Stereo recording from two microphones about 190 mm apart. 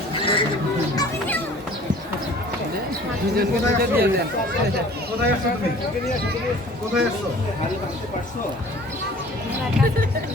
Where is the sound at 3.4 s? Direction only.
50° right (ahead or behind).